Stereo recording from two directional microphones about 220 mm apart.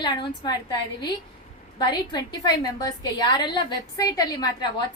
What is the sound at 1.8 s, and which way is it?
A woman's voice, 20° left (ahead or behind).